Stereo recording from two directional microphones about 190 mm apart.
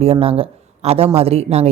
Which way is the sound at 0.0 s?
30° right (ahead or behind).